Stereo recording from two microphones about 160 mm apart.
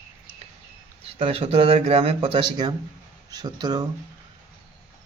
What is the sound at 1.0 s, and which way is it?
Speech, 35° right (ahead or behind).